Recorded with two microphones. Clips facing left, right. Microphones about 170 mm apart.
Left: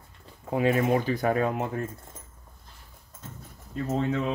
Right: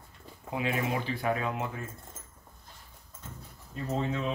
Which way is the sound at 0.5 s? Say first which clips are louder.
Left 8 dB; 45° left (ahead or behind).